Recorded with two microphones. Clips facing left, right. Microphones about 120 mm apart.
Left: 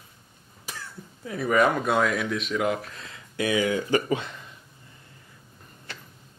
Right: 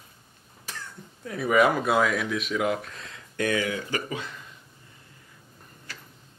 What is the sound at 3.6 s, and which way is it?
Speech, 30° left (ahead or behind).